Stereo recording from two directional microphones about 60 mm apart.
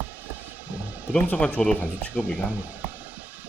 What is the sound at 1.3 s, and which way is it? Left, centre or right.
Speech, centre.